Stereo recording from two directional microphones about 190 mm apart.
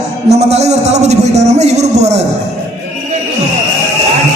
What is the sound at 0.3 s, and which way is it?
A man's voice, 35° right (ahead or behind).